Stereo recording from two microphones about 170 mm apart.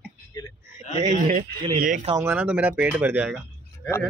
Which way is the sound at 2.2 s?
10° right (ahead or behind).